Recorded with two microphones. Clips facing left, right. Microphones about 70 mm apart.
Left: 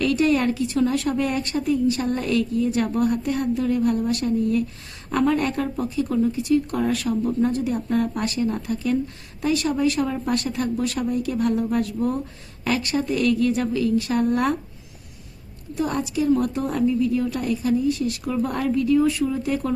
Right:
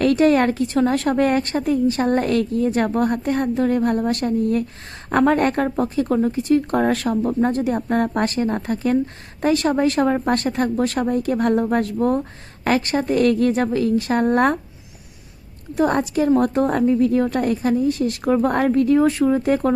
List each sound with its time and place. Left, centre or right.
0.0 s a woman's voice: right
15.7 s a woman's voice: right